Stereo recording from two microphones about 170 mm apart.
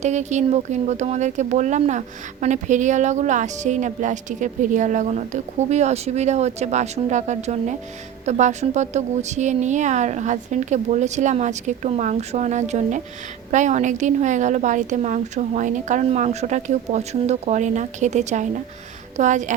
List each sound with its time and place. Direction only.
0.0 s speech: 45° right (ahead or behind)